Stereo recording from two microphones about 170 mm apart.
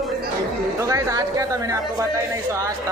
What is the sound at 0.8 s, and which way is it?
Chatter, 20° right (ahead or behind).